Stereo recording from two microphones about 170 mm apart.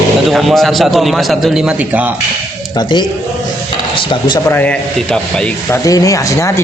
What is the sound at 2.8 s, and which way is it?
Speech, 25° left (ahead or behind).